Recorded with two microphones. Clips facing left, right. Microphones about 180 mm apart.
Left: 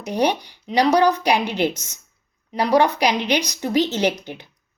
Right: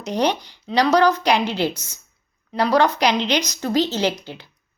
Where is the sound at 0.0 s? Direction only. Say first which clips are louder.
Even; 10° left (ahead or behind).